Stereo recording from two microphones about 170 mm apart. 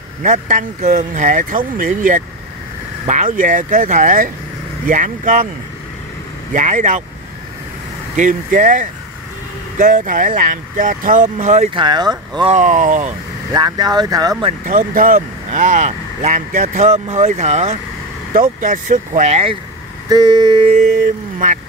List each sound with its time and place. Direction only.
0.2 s speech: 45° right (ahead or behind)
6.5 s speech: 50° right (ahead or behind)
8.2 s speech: 50° right (ahead or behind)
11.7 s speech: 25° right (ahead or behind)
12.4 s speech: 45° right (ahead or behind)
13.5 s speech: 20° right (ahead or behind)
14.7 s speech: 55° right (ahead or behind)
20.1 s speech: 25° right (ahead or behind)